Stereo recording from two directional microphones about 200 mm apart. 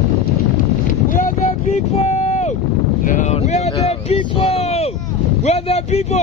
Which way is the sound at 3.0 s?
40° left (ahead or behind).